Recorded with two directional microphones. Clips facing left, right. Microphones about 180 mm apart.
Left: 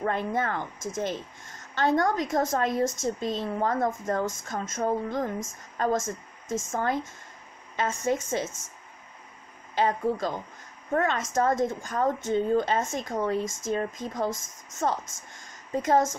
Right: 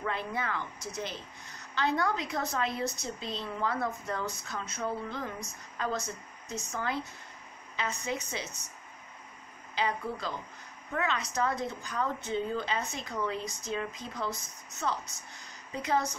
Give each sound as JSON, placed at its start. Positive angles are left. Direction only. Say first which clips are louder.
{"t": 0.0, "sound": "a woman's voice", "louder": "left 7 dB", "side_deg": 50}
{"t": 9.8, "sound": "a woman's voice", "louder": "left 7 dB", "side_deg": 45}